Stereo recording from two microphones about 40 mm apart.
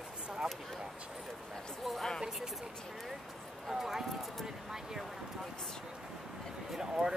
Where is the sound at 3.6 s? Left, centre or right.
Centre.